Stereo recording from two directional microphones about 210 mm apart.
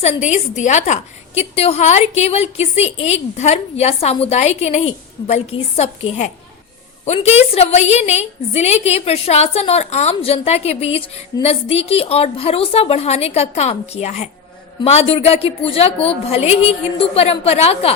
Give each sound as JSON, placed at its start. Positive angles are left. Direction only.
{"t": 0.0, "sound": "a woman's voice", "side_deg": 35}